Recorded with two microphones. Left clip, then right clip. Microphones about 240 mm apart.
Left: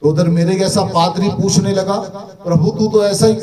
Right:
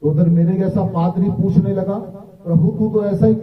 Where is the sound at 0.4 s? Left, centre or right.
Left.